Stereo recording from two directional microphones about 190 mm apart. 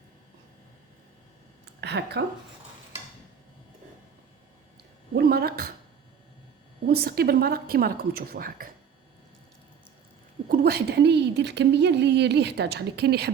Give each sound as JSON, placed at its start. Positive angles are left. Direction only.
{"t": 1.6, "sound": "speech", "side_deg": -60}
{"t": 5.1, "sound": "speech", "side_deg": -55}
{"t": 6.8, "sound": "a woman's voice", "side_deg": -55}
{"t": 10.5, "sound": "a woman's voice", "side_deg": -55}